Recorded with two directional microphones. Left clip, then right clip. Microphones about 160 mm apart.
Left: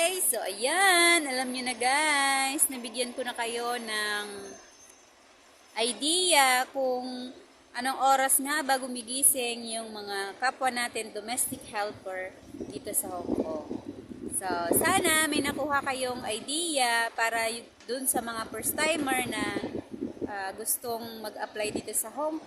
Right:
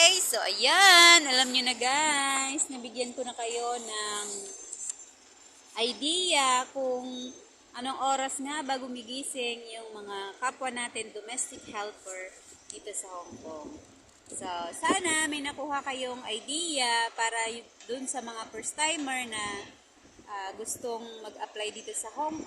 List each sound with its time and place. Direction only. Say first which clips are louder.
0.0 s speech: right 6 dB; 25° left (ahead or behind)
5.7 s a woman's voice: left 1 dB; 15° left (ahead or behind)
14.4 s speech: left 3 dB; 20° left (ahead or behind)